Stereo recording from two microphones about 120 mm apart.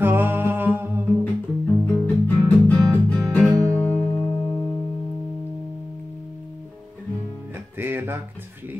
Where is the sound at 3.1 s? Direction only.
10° left (ahead or behind).